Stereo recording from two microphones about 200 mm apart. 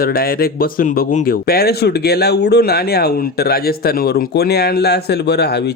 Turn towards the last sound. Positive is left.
turn(degrees=55)  # may be behind; listen again after turning